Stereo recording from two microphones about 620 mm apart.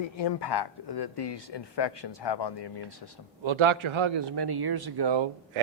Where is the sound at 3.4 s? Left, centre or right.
Right.